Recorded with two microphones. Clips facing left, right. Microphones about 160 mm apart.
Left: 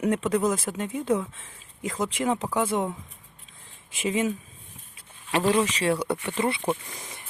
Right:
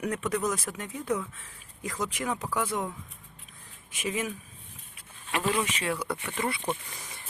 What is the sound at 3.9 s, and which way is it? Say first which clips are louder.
Speech: left 6 dB; 25° left (ahead or behind).